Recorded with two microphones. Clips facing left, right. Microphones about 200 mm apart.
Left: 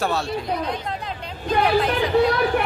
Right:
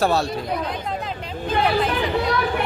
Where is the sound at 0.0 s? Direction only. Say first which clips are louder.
Right 4 dB; 40° right (ahead or behind).